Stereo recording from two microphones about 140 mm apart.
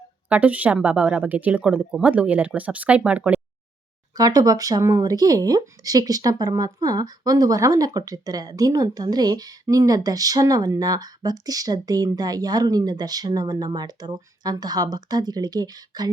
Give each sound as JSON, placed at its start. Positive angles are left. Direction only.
{"t": 0.3, "sound": "speech", "side_deg": -10}
{"t": 4.2, "sound": "speech", "side_deg": -25}